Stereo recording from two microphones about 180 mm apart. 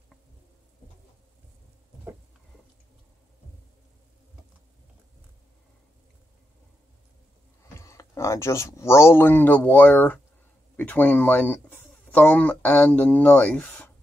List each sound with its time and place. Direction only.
7.7 s speech: 15° left (ahead or behind)